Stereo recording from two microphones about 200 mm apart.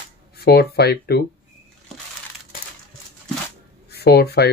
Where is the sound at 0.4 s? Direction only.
55° left (ahead or behind).